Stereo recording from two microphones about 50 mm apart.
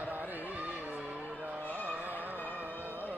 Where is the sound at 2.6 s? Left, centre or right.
Right.